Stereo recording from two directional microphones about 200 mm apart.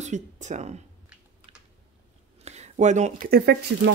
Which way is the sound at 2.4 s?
35° right (ahead or behind).